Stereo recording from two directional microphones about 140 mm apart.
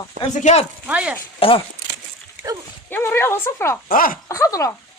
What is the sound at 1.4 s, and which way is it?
Speech, 40° left (ahead or behind).